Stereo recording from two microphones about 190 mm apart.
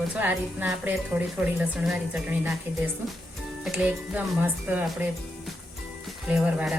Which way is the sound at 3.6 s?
5° right (ahead or behind).